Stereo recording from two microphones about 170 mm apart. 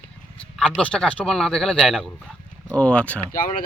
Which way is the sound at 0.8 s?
5° left (ahead or behind).